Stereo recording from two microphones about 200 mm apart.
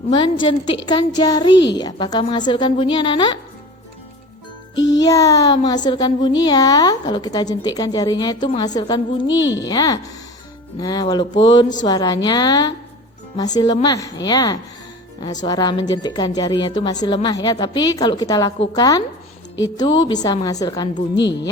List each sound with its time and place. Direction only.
0.1 s a woman's voice: 25° left (ahead or behind)
4.8 s music: 65° left (ahead or behind)
5.0 s a woman's voice: 15° left (ahead or behind)
9.2 s speech: 70° left (ahead or behind)
9.6 s a woman's voice: 20° left (ahead or behind)